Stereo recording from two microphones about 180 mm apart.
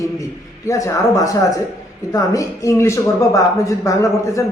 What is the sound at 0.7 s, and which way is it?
Speech, 20° left (ahead or behind).